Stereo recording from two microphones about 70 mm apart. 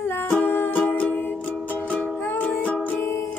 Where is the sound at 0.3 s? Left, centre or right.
Left.